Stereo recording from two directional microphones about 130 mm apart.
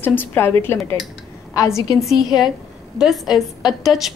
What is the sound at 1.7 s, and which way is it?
A woman's voice, centre (ahead or behind).